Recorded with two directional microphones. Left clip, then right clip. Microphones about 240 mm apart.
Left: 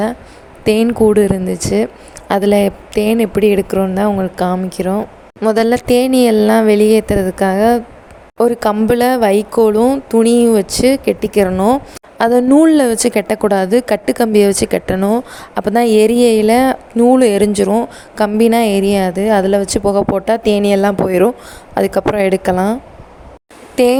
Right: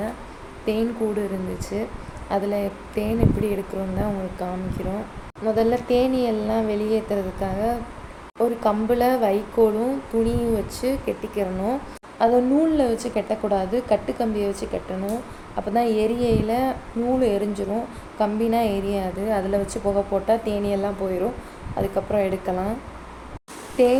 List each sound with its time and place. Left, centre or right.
0.6 s a woman's voice: left
23.7 s speech: left